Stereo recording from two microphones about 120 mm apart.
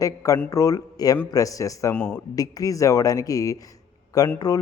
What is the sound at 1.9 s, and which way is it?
Speech, 10° left (ahead or behind).